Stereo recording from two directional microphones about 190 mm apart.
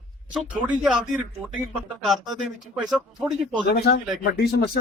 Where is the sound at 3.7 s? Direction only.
55° left (ahead or behind).